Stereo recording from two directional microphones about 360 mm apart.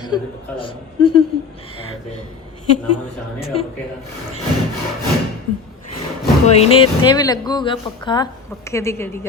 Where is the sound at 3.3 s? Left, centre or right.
Left.